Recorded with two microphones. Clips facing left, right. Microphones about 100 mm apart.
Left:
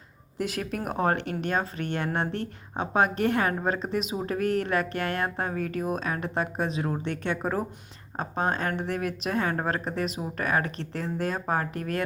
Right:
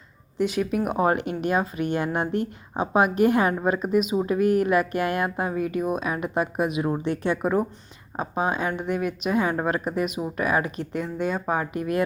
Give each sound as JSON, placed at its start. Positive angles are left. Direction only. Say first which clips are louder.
{"t": 0.3, "sound": "speech", "louder": "right 7 dB", "side_deg": 0}